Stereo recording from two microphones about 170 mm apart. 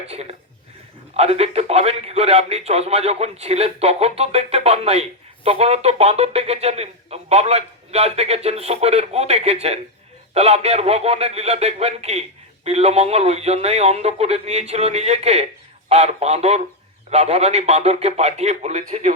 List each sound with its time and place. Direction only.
0.1 s speech: 40° right (ahead or behind)